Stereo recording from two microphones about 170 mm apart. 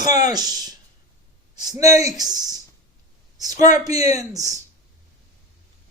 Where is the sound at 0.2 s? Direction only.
25° right (ahead or behind).